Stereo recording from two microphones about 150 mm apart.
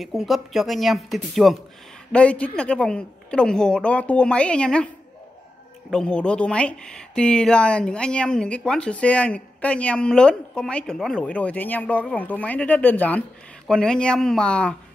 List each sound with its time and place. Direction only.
0.0 s speech: centre (ahead or behind)
5.9 s speech: 5° left (ahead or behind)